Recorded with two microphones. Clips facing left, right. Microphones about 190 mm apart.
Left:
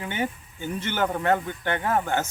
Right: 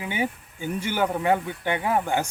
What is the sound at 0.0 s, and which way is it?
Speech, 10° right (ahead or behind).